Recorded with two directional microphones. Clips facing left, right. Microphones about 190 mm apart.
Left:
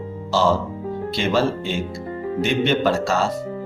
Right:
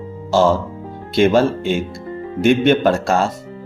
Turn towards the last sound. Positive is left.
turn(degrees=-50)  # may be behind; listen again after turning